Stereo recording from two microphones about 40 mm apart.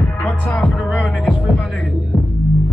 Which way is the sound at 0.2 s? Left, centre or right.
Left.